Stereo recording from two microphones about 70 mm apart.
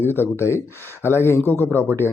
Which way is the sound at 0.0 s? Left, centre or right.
Left.